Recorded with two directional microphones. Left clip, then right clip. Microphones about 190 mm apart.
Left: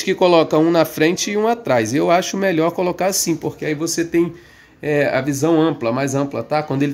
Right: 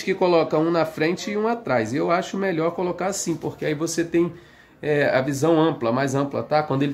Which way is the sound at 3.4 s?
15° left (ahead or behind).